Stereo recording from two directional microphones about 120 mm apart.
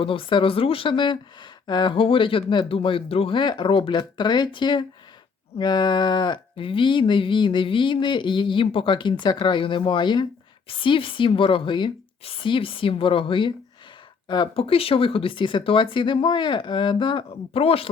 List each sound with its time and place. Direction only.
0.0 s speech: 45° left (ahead or behind)